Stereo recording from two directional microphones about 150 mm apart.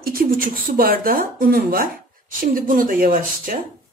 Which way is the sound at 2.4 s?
70° right (ahead or behind).